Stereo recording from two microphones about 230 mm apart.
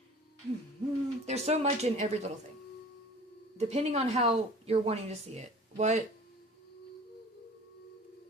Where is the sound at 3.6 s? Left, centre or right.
Right.